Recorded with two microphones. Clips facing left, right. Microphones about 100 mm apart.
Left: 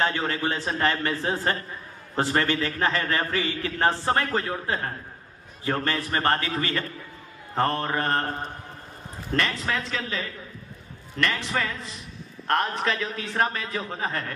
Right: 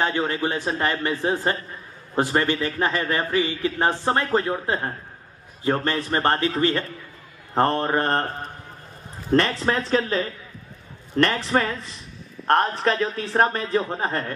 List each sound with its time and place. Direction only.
0.0 s a man's voice: 15° right (ahead or behind); by 8.3 s 35° right (ahead or behind)
9.3 s a man's voice: 35° right (ahead or behind)